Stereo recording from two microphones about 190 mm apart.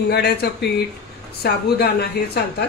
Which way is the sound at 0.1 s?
60° left (ahead or behind).